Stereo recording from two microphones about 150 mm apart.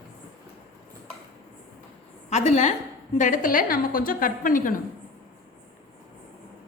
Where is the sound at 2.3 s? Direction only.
50° left (ahead or behind).